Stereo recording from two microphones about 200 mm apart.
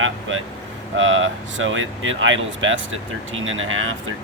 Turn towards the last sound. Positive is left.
turn(degrees=-85)